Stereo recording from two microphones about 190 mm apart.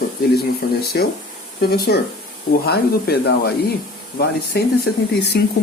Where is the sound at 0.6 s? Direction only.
50° left (ahead or behind).